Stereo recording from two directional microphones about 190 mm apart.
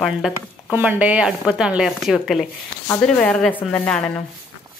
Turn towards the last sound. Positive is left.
turn(degrees=5)  # may be behind; listen again after turning